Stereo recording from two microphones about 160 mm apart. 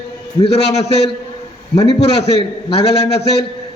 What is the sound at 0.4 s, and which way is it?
A man's voice, 40° left (ahead or behind).